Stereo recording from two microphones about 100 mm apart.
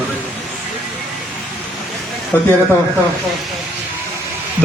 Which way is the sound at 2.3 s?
20° left (ahead or behind).